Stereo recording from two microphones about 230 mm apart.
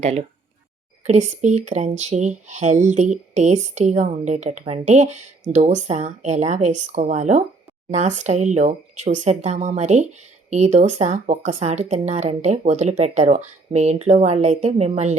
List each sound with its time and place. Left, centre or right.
0.0 s speech: right